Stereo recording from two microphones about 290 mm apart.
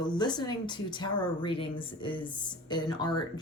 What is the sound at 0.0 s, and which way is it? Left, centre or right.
Speech, centre.